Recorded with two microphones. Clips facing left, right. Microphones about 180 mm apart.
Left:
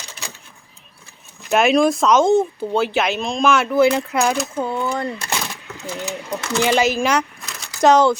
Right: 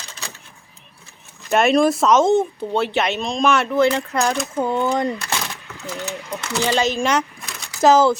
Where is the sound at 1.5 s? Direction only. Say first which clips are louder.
Even; centre (ahead or behind).